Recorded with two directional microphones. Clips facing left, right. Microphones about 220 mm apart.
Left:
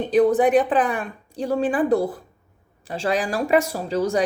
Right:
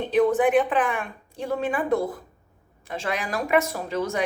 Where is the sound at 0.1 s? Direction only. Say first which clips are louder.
Left 3 dB; 35° left (ahead or behind).